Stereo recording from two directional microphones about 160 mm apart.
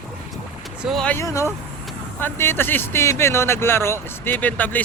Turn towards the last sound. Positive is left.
turn(degrees=10)  # may be behind; listen again after turning